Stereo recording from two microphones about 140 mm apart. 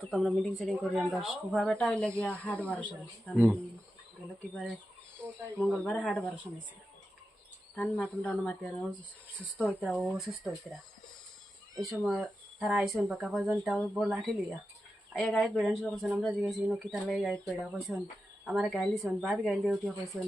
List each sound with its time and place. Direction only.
0.1 s speech: centre (ahead or behind)
5.5 s speech: 5° left (ahead or behind)
7.8 s speech: 10° left (ahead or behind)
9.8 s speech: centre (ahead or behind)
11.8 s speech: centre (ahead or behind)